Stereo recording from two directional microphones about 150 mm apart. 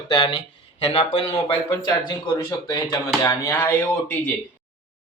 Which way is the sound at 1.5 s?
30° left (ahead or behind).